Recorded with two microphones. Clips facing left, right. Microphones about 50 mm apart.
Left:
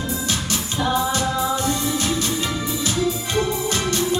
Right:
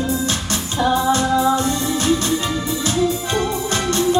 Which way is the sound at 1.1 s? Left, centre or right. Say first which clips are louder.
Right 5 dB; right.